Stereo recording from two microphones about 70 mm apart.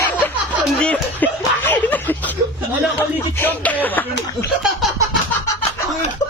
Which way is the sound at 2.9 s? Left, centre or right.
Left.